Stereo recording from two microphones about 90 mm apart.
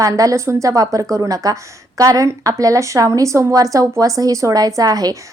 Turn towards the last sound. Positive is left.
turn(degrees=-45)  # may be behind; listen again after turning